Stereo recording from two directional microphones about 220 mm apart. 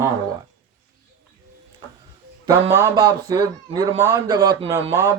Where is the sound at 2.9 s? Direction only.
15° right (ahead or behind).